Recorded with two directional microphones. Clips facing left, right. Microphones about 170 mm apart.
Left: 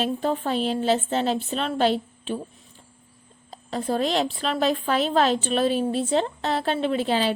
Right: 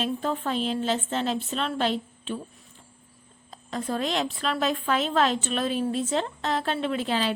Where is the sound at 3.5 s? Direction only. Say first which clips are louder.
Left 4 dB; 30° left (ahead or behind).